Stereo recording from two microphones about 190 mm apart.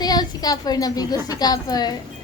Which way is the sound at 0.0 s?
20° left (ahead or behind).